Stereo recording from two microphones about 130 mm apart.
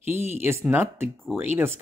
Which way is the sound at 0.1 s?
20° right (ahead or behind).